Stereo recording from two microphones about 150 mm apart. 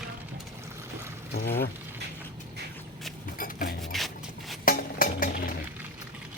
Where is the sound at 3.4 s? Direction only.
70° left (ahead or behind).